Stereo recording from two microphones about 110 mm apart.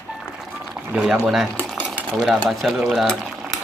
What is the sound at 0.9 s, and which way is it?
Speech, 5° right (ahead or behind).